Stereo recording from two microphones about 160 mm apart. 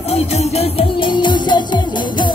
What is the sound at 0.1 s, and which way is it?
Music, 40° left (ahead or behind).